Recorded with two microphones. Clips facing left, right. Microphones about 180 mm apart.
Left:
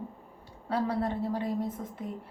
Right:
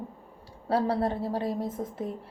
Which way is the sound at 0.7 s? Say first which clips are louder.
Right 3 dB; 30° right (ahead or behind).